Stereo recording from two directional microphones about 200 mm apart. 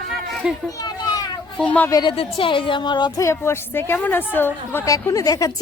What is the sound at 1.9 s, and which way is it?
Speech, 20° left (ahead or behind).